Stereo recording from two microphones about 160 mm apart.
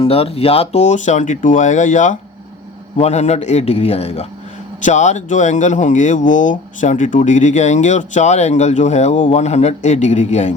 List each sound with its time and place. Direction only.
0.0 s speech: 40° left (ahead or behind)